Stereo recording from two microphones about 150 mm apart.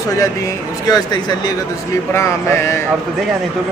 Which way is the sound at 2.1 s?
15° left (ahead or behind).